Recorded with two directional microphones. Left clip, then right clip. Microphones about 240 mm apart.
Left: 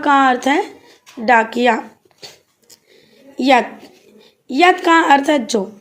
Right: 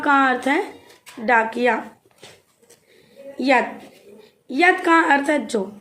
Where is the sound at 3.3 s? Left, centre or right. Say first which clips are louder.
Left 5 dB; left.